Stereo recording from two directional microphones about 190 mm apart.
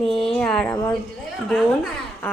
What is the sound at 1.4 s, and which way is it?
Speech, 5° left (ahead or behind).